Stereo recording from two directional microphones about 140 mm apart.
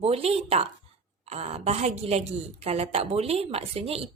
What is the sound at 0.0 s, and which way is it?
A woman's voice, 45° right (ahead or behind).